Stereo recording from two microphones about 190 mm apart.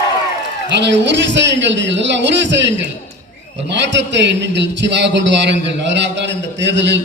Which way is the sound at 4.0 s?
65° right (ahead or behind).